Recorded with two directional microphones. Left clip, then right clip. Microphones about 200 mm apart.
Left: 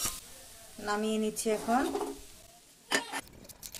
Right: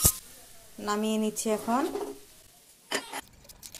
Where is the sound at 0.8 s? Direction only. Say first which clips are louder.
Right 2 dB; 35° right (ahead or behind).